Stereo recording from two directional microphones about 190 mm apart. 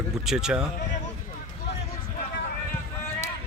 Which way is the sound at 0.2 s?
5° right (ahead or behind).